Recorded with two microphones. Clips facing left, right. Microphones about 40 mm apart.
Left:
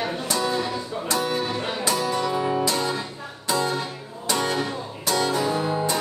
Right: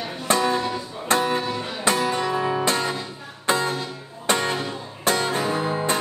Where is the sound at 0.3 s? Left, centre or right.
Right.